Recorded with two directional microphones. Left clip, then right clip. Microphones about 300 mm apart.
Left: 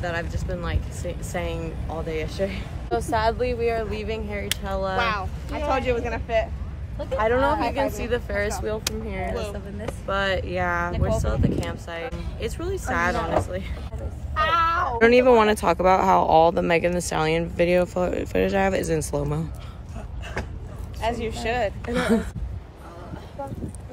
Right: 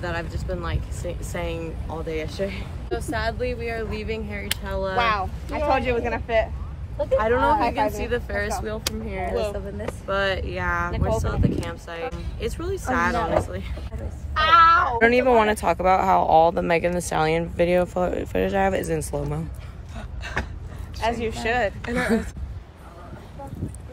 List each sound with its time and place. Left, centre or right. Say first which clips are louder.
0.0 s speech: left 1 dB; centre
2.9 s speech: left 4 dB; centre
4.9 s speech: right 6 dB; right
7.2 s speech: right 1 dB; centre
7.5 s speech: right 3 dB; right
8.0 s speech: left 1 dB; centre
9.2 s speech: right 6 dB; right
10.0 s speech: even; centre
14.3 s cat: right 6 dB; right
15.0 s speech: left 1 dB; centre
20.4 s a sound: right 3 dB; right
21.0 s speech: right 2 dB; right
21.9 s speech: left 2 dB; centre